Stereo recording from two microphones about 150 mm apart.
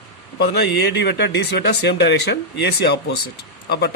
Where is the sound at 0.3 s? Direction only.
90° left.